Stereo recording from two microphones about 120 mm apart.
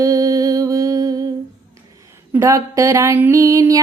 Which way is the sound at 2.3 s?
25° right (ahead or behind).